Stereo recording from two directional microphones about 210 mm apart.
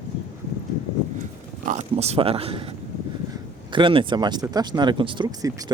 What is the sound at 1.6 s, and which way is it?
Speech, 30° right (ahead or behind).